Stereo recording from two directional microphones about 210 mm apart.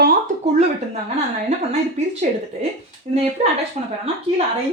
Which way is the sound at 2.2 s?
40° right (ahead or behind).